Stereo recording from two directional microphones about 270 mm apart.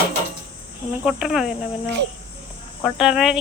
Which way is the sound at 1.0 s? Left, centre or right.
Centre.